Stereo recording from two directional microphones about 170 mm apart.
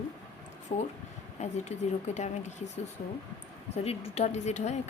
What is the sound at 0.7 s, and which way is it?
A woman's voice, 45° left (ahead or behind).